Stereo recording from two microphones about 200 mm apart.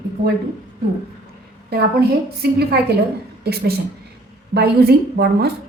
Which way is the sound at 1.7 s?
55° right (ahead or behind).